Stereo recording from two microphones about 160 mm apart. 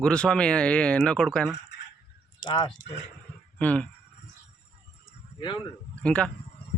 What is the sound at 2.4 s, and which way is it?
Speech, 30° left (ahead or behind).